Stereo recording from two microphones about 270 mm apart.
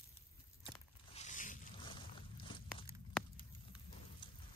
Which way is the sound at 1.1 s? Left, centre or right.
Left.